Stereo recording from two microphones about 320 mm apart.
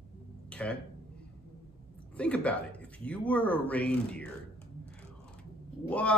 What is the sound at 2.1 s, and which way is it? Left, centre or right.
Speech, centre.